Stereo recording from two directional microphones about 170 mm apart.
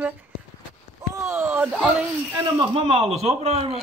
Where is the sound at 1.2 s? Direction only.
15° right (ahead or behind).